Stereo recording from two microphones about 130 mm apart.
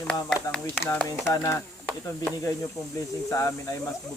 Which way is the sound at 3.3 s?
25° left (ahead or behind).